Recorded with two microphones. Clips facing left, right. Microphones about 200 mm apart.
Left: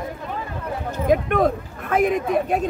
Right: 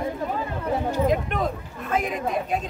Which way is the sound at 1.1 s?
55° left (ahead or behind).